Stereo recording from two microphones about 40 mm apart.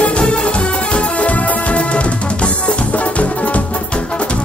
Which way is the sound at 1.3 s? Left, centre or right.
Left.